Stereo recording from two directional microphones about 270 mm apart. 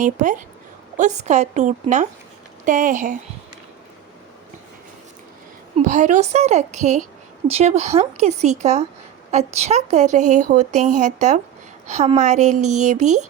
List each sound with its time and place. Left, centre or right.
0.0 s a woman's voice: right
5.7 s a woman's voice: right